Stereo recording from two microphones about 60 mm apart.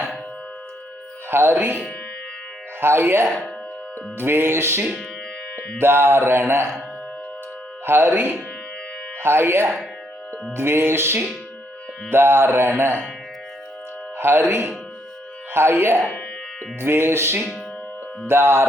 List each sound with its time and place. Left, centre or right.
1.3 s mantra: right
2.8 s mantra: right
7.9 s mantra: right
14.2 s speech: right
15.5 s mantra: right
18.3 s music: right